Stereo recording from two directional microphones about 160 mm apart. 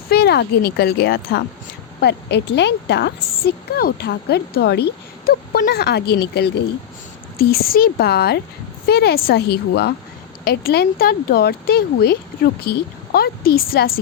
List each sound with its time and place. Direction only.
0.1 s a woman's voice: 90° left
7.3 s speech: 70° left (ahead or behind); by 9.9 s 90° left
10.4 s speech: 75° left (ahead or behind)
13.1 s speech: 70° left (ahead or behind)